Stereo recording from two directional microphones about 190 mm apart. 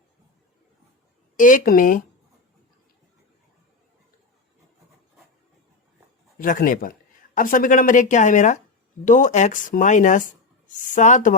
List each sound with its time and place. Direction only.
1.4 s speech: 45° left (ahead or behind)
6.4 s speech: 45° left (ahead or behind)